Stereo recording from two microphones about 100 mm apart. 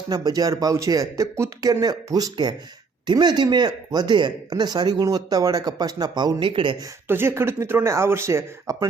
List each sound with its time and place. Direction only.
0.1 s speech: 40° right (ahead or behind)
6.4 s speech: 60° right (ahead or behind)
7.1 s speech: 25° right (ahead or behind)